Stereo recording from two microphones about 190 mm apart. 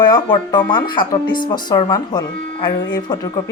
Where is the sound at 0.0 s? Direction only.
25° left (ahead or behind).